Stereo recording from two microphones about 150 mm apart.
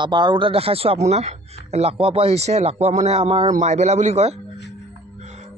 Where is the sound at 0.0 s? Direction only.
30° right (ahead or behind).